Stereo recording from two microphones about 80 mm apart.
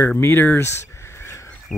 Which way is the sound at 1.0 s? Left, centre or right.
Left.